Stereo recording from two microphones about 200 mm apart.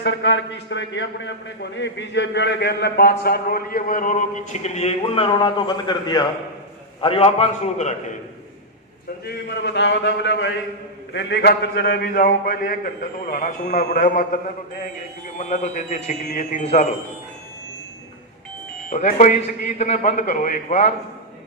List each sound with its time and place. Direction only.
0.0 s a man's voice: 60° left (ahead or behind); by 7.9 s 35° left (ahead or behind)
9.2 s a man's voice: 60° left (ahead or behind); by 14.3 s 40° left (ahead or behind)
15.4 s a man's voice: 35° left (ahead or behind)
18.9 s a man's voice: 40° left (ahead or behind)